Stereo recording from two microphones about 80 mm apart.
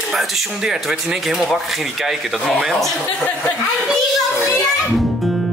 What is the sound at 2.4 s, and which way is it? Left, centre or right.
Speech, centre.